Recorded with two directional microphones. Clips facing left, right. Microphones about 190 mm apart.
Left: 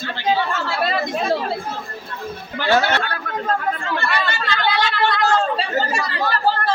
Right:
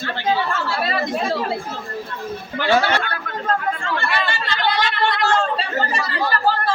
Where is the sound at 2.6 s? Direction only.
10° right (ahead or behind).